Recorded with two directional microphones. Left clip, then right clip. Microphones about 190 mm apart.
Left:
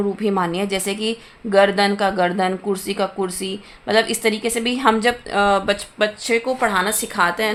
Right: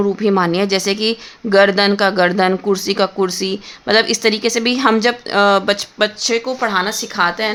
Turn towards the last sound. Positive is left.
turn(degrees=-5)  # may be behind; listen again after turning